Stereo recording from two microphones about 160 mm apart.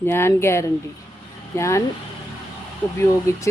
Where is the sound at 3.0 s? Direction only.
20° left (ahead or behind).